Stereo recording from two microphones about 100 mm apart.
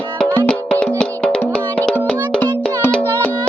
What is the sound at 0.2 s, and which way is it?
Music, 15° left (ahead or behind).